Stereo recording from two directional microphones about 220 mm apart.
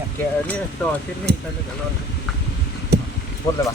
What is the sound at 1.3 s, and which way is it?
Speech, 45° right (ahead or behind).